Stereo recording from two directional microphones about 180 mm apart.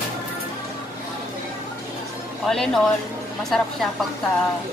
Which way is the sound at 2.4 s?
Centre (ahead or behind).